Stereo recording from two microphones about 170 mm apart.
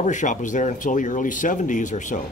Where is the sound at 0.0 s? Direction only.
45° left (ahead or behind).